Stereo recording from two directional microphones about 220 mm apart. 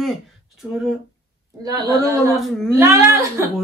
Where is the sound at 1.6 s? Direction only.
15° right (ahead or behind).